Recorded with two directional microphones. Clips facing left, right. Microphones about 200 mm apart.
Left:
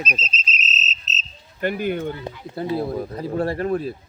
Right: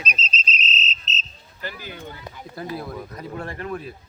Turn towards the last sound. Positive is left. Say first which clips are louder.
# left 8 dB
turn(degrees=35)  # may be behind; listen again after turning